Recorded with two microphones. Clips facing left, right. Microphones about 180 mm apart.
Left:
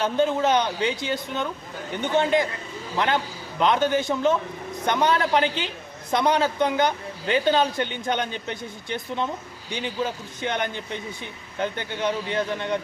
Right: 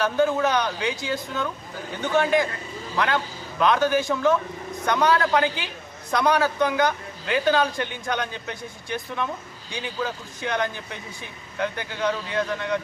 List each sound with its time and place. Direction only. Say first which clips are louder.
0.0 s a man's voice: even; 25° left (ahead or behind)
12.5 s a man's voice: even; 25° left (ahead or behind)